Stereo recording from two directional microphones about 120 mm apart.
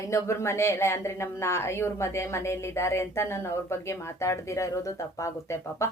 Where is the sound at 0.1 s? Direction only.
25° left (ahead or behind).